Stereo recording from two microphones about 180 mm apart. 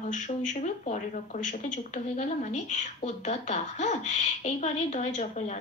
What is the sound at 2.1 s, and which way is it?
A woman's voice, 40° left (ahead or behind).